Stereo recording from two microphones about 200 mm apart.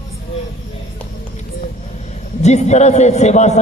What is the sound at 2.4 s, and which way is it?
Speech, 35° left (ahead or behind).